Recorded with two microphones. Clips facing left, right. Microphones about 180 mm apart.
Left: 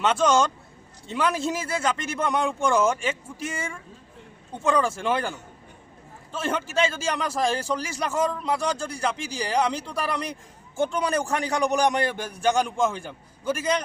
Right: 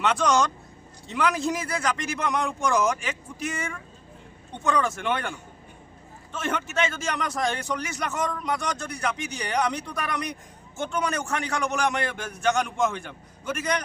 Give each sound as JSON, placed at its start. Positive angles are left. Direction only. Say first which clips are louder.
{"t": 0.0, "sound": "a man's voice", "louder": "left 2 dB", "side_deg": 25}
{"t": 6.3, "sound": "a man's voice", "louder": "left 2 dB", "side_deg": 30}